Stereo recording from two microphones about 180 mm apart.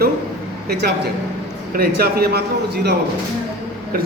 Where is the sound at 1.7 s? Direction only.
55° right (ahead or behind).